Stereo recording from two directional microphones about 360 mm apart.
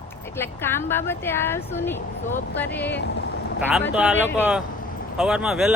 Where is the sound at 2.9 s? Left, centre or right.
Left.